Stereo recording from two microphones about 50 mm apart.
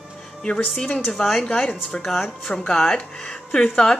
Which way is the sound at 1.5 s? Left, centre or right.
Centre.